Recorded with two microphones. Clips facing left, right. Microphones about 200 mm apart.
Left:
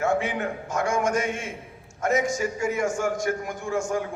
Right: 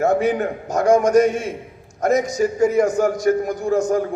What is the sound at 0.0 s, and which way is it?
A man's voice, 40° right (ahead or behind).